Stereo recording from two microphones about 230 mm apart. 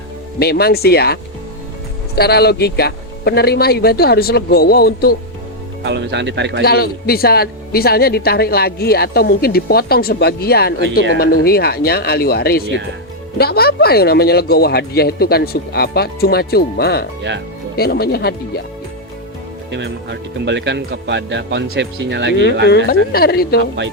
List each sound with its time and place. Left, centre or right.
0.3 s a man's voice: left
5.8 s speech: right
6.6 s a man's voice: left
19.7 s speech: right
22.9 s a woman's voice: left